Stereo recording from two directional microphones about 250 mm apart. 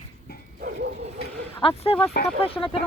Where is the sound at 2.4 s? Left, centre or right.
Left.